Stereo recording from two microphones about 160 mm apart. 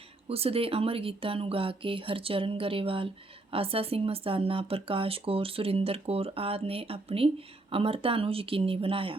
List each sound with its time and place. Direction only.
0.3 s speech: 40° right (ahead or behind)